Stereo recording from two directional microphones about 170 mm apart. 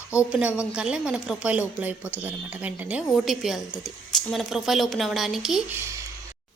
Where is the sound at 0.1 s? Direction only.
5° right (ahead or behind).